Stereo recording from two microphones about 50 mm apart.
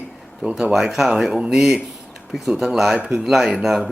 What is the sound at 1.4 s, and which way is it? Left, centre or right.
Speech, centre.